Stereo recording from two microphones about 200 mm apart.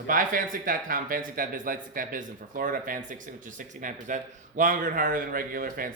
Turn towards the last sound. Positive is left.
turn(degrees=-45)  # may be behind; listen again after turning